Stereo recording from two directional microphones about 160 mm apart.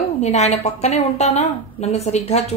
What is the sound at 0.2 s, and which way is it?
A woman's voice, 45° left (ahead or behind).